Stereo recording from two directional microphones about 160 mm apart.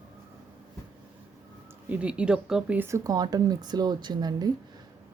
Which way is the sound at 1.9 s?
10° right (ahead or behind).